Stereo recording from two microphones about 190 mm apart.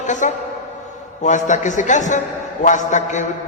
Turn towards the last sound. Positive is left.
turn(degrees=40)  # may be behind; listen again after turning